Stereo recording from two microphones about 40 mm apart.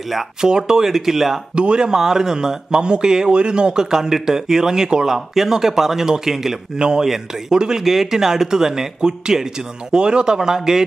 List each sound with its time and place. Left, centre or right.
0.4 s a man's voice: centre
1.5 s a man's voice: right